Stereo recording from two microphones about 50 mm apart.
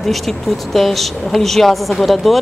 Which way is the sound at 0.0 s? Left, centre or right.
Centre.